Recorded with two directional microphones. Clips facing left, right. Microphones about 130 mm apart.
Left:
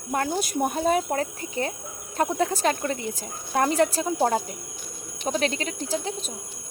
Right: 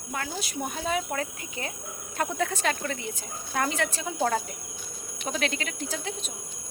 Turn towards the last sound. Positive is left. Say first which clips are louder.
# left 5 dB
turn(degrees=35)  # may be behind; listen again after turning